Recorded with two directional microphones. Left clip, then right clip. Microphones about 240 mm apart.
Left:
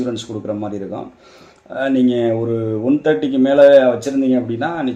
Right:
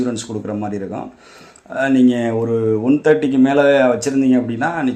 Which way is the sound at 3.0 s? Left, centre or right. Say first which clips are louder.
Right 2 dB; right.